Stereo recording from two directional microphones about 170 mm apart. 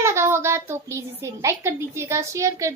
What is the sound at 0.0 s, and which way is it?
A woman's voice, 15° right (ahead or behind).